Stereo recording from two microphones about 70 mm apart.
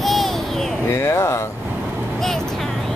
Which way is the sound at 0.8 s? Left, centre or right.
Left.